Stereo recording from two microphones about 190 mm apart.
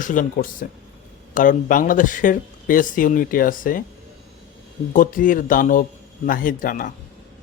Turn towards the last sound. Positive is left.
turn(degrees=45)  # may be behind; listen again after turning